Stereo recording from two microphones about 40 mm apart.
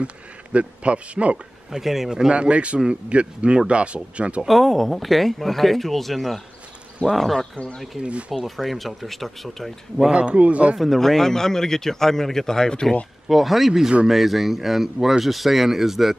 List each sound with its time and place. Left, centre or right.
0.0 s a man's voice: right
1.7 s speech: centre
2.3 s a man's voice: right
4.5 s speech: centre
7.5 s speech: left
8.0 s a man's voice: right
8.5 s speech: centre
10.1 s a man's voice: right
10.8 s a man's voice: centre
13.3 s speech: centre